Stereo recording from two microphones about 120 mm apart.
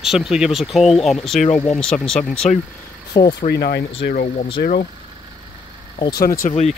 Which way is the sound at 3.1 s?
30° left (ahead or behind).